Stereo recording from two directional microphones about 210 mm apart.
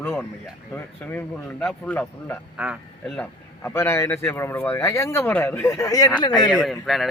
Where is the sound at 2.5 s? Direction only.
5° right (ahead or behind); by 6.1 s 15° left (ahead or behind).